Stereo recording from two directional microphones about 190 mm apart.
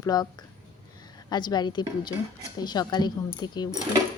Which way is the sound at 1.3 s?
25° left (ahead or behind).